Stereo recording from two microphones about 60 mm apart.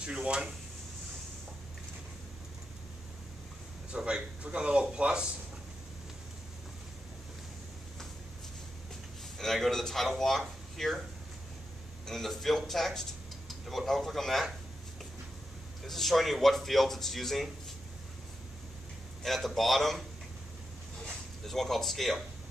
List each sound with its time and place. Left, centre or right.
0.0 s a man's voice: centre
3.9 s a man's voice: centre
9.4 s speech: centre
12.1 s speech: centre
15.8 s speech: centre
19.2 s speech: centre
21.5 s speech: centre